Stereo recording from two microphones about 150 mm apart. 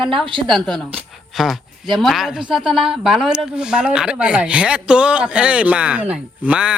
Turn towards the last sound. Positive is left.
turn(degrees=-5)  # may be behind; listen again after turning